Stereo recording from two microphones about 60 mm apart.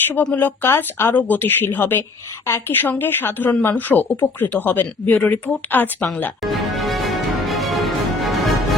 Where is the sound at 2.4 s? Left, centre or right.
Left.